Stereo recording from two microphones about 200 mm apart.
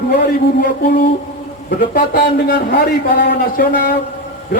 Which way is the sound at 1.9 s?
45° left (ahead or behind).